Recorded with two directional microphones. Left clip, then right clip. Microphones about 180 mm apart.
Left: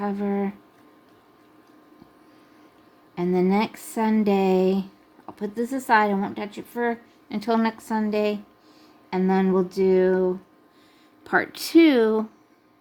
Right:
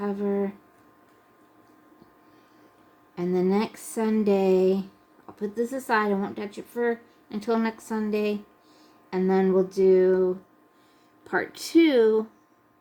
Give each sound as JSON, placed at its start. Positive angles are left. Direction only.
{"t": 0.0, "sound": "speech", "side_deg": 35}
{"t": 3.2, "sound": "speech", "side_deg": 35}